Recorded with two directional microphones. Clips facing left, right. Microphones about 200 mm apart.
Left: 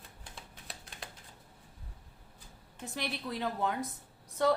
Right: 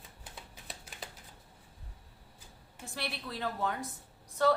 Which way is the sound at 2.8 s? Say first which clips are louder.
Left 3 dB; 20° left (ahead or behind).